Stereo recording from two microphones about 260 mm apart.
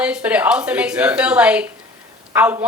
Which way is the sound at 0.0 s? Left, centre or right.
Centre.